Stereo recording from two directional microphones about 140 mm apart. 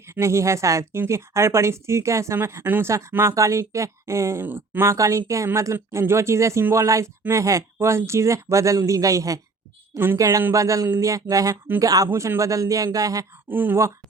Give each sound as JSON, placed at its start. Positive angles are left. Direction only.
{"t": 0.1, "sound": "speech", "side_deg": -20}